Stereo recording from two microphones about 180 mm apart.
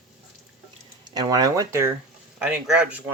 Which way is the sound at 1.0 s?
20° right (ahead or behind).